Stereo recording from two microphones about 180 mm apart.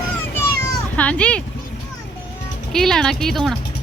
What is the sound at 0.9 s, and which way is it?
Speech, 5° left (ahead or behind).